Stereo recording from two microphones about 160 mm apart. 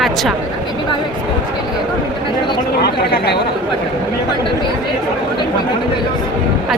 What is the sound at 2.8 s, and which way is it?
Speech, 80° left.